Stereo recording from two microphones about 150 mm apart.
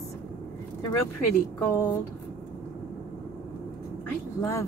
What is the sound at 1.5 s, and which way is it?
Speech, 15° left (ahead or behind).